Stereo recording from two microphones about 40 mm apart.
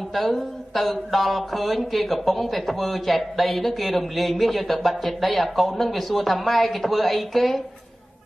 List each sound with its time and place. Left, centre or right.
0.1 s speech: centre